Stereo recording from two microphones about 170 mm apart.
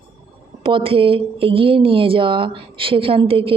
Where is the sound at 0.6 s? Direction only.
30° right (ahead or behind).